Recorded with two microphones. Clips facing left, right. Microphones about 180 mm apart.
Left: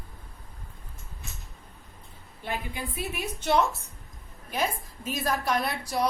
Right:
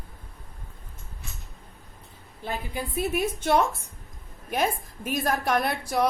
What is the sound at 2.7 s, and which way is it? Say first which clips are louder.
A woman's voice: right 7 dB; 45° right (ahead or behind).